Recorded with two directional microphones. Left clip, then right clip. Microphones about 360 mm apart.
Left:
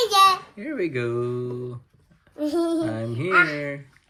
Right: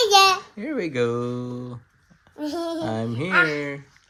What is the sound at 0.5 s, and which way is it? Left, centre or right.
Speech, centre.